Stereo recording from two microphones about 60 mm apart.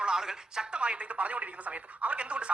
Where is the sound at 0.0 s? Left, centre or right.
Centre.